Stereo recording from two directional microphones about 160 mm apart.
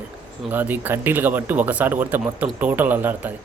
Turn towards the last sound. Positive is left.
turn(degrees=-10)  # may be behind; listen again after turning